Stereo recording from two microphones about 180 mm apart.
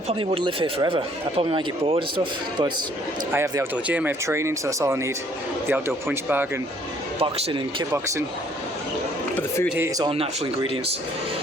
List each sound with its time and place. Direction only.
0.1 s speech: 30° right (ahead or behind)
3.3 s speech: 15° right (ahead or behind)
7.2 s speech: 30° right (ahead or behind)
9.6 s speech: 10° right (ahead or behind)
10.0 s speech: 30° right (ahead or behind)